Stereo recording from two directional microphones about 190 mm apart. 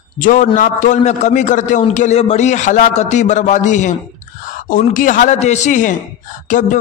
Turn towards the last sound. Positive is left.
turn(degrees=40)  # may be behind; listen again after turning